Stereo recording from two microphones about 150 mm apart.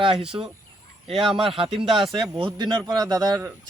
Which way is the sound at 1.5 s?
35° right (ahead or behind).